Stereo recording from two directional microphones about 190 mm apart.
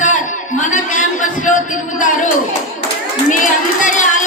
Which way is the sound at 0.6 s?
40° left (ahead or behind).